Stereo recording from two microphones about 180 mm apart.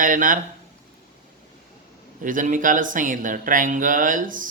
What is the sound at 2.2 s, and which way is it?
A man's voice, 45° right (ahead or behind).